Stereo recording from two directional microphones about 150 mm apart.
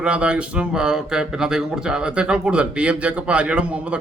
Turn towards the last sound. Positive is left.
turn(degrees=-10)  # may be behind; listen again after turning